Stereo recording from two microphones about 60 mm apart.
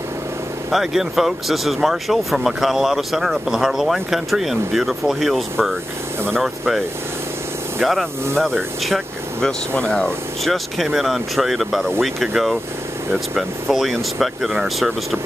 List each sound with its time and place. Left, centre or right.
0.7 s speech: centre
7.8 s speech: centre
9.8 s speech: centre
10.4 s speech: centre